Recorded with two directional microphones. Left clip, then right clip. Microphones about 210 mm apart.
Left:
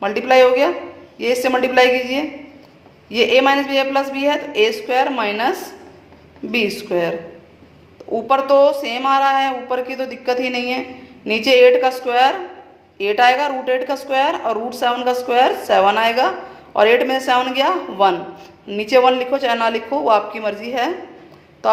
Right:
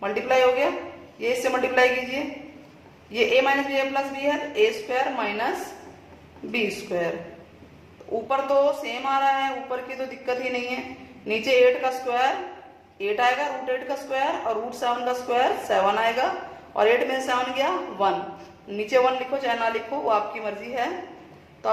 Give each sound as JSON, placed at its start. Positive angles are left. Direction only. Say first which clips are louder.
{"t": 0.0, "sound": "a woman's voice", "louder": "left 8 dB", "side_deg": 45}
{"t": 6.5, "sound": "a woman's voice", "louder": "left 7 dB", "side_deg": 45}
{"t": 8.1, "sound": "a woman's voice", "louder": "left 8 dB", "side_deg": 40}